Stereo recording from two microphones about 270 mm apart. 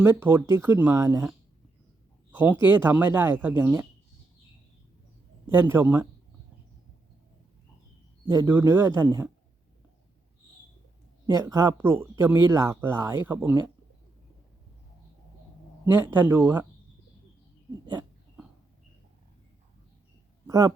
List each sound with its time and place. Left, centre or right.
0.0 s speech: centre
5.5 s speech: centre
8.3 s speech: centre
11.3 s speech: centre
16.0 s speech: centre
20.5 s speech: centre